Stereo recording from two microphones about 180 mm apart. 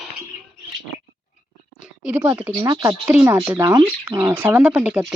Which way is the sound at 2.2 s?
10° right (ahead or behind).